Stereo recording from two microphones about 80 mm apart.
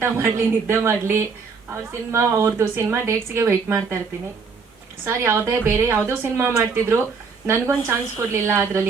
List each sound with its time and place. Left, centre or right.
0.0 s a woman's voice: right
5.0 s a woman's voice: right